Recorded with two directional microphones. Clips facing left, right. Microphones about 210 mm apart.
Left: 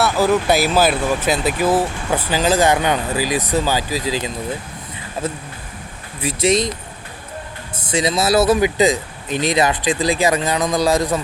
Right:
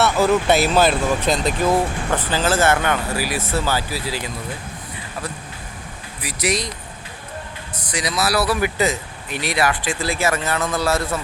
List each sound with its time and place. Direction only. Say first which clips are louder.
0.0 s speech: left 1 dB; centre (ahead or behind); by 6.7 s 25° left (ahead or behind)
7.8 s speech: left 5 dB; 25° left (ahead or behind)